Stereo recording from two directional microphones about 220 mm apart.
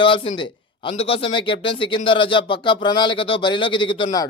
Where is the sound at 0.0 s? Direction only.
20° left (ahead or behind).